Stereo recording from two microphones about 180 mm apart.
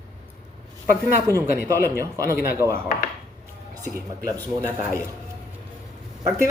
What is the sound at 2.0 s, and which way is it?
Speech, 15° right (ahead or behind).